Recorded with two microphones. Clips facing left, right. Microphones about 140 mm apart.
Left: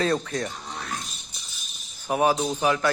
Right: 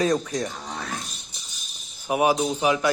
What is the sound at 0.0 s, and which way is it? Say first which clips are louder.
Speech: right 2 dB; 15° right (ahead or behind).